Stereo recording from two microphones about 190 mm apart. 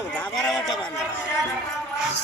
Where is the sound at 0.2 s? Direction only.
Centre (ahead or behind).